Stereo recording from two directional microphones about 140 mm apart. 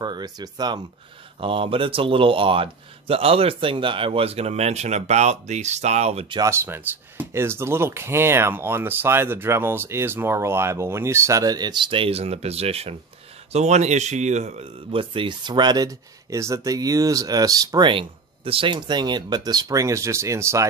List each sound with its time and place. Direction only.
0.0 s speech: 30° right (ahead or behind)
1.4 s speech: 40° right (ahead or behind)
6.4 s speech: 15° right (ahead or behind)